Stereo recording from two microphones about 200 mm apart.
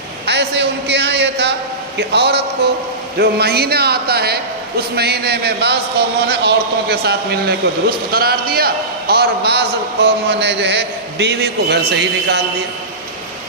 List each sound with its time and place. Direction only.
0.3 s a man's voice: 55° right (ahead or behind)